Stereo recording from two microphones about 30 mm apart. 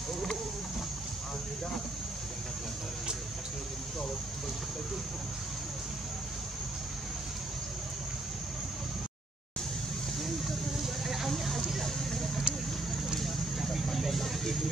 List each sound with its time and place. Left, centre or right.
10.2 s vehicle: centre